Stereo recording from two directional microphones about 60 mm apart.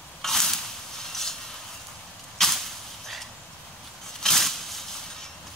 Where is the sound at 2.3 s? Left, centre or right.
Centre.